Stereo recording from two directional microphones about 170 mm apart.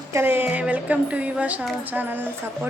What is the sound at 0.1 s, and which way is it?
Speech, 15° right (ahead or behind).